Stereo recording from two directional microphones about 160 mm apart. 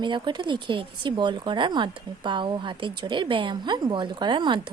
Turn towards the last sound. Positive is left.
turn(degrees=-30)  # may be behind; listen again after turning